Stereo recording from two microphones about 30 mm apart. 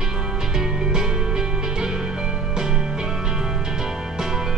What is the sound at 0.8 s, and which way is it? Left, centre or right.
Music, right.